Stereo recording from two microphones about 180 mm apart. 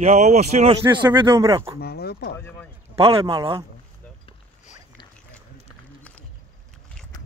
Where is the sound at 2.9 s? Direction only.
30° right (ahead or behind).